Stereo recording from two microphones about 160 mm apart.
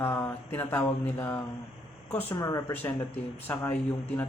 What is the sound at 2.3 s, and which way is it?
Speech, 25° left (ahead or behind).